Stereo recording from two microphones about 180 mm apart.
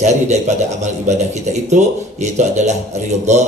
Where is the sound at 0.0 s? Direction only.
40° right (ahead or behind).